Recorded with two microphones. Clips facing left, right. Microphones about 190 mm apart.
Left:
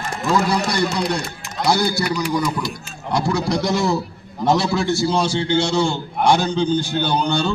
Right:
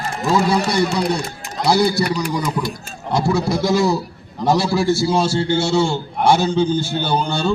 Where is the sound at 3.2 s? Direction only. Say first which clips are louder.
Right 3 dB; 5° right (ahead or behind).